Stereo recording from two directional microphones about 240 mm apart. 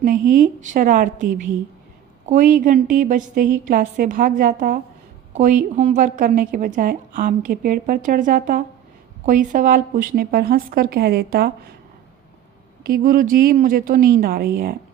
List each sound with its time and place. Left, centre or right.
0.0 s a woman's voice: right
12.8 s a woman's voice: right